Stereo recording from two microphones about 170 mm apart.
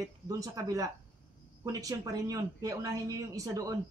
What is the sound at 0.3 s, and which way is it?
A man's voice, 20° right (ahead or behind).